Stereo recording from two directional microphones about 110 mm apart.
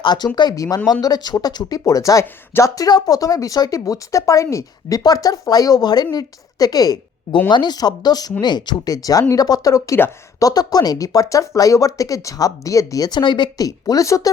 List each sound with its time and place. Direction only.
0.0 s speech: 40° left (ahead or behind)